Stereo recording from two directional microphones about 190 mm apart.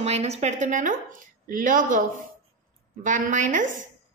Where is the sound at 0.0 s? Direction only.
35° right (ahead or behind).